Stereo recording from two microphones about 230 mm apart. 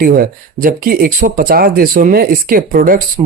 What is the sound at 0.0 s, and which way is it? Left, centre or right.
Speech, right.